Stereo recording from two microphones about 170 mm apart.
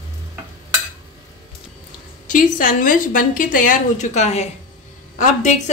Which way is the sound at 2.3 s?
50° left (ahead or behind).